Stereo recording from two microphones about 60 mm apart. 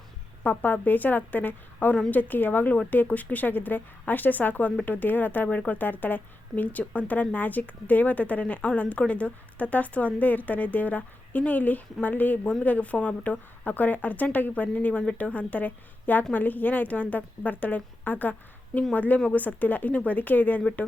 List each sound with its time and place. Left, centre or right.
0.4 s a woman's voice: left
20.6 s a woman's voice: centre